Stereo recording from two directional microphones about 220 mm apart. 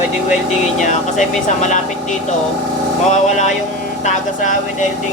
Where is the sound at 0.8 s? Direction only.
35° left (ahead or behind).